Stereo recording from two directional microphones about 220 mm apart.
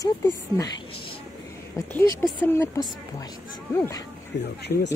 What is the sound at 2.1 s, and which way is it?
Speech, 10° left (ahead or behind).